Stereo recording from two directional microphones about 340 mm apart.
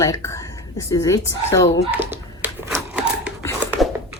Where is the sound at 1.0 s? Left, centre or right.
Centre.